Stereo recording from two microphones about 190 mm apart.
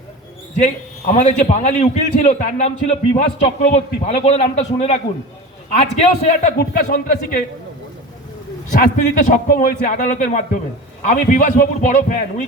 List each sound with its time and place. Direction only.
0.5 s a man's voice: 40° left (ahead or behind)
8.7 s a man's voice: 45° left (ahead or behind)